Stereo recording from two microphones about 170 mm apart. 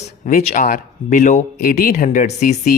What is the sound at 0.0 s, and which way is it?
Speech, 50° left (ahead or behind).